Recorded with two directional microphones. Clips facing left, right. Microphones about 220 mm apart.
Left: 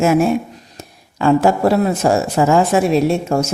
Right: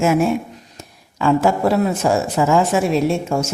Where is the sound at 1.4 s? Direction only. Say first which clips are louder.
Left 2 dB; 35° left (ahead or behind).